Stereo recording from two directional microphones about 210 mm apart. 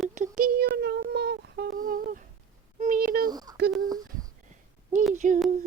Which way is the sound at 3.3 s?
20° right (ahead or behind).